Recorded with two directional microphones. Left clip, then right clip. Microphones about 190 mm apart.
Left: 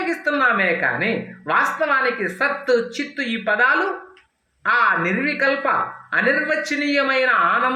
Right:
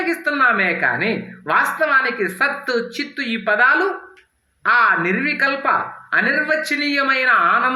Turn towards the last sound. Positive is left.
turn(degrees=-35)  # may be behind; listen again after turning